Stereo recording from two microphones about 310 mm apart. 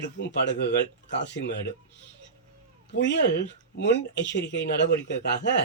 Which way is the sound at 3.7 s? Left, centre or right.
Left.